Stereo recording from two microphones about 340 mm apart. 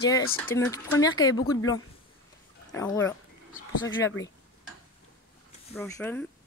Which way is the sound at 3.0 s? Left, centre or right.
Left.